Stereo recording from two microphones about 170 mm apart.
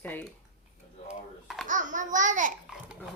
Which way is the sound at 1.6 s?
50° right (ahead or behind).